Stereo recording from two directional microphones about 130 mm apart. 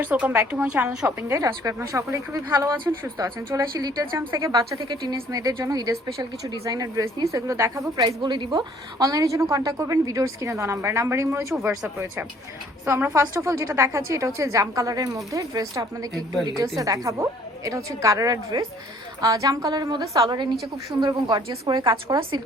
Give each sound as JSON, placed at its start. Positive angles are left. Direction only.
{"t": 0.0, "sound": "speech", "side_deg": -15}
{"t": 1.3, "sound": "a woman's voice", "side_deg": -25}
{"t": 13.1, "sound": "a woman's voice", "side_deg": -20}